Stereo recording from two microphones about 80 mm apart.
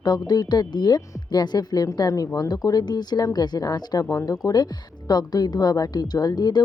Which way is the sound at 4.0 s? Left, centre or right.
Left.